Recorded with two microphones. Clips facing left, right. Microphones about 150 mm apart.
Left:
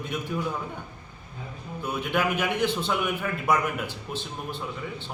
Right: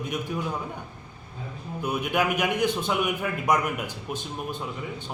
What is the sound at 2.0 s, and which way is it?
A man's voice, 15° right (ahead or behind).